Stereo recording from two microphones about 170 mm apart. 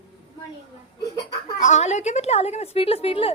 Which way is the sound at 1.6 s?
45° left (ahead or behind).